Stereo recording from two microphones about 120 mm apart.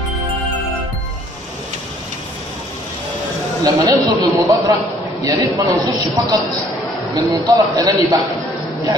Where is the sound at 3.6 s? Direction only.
35° right (ahead or behind).